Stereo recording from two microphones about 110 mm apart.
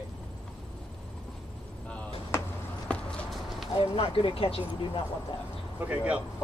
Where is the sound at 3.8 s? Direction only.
55° left (ahead or behind).